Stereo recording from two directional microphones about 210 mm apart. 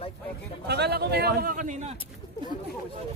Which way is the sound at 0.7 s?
50° right (ahead or behind).